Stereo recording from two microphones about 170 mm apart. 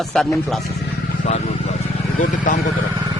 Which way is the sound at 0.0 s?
Centre (ahead or behind).